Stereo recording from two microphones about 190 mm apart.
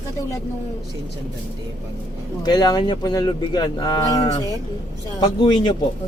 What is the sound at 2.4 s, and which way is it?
Speech, 20° left (ahead or behind).